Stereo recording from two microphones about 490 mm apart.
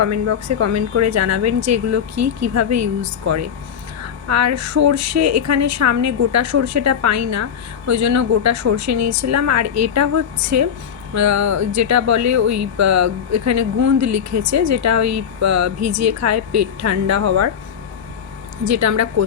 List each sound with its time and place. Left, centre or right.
0.0 s speech: right
18.6 s speech: right